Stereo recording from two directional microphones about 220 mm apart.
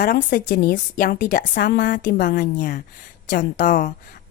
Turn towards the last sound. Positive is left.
turn(degrees=35)  # may be behind; listen again after turning